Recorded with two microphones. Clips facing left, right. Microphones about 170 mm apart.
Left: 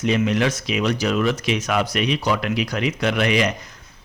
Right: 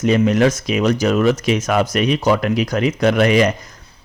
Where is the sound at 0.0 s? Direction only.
45° right (ahead or behind).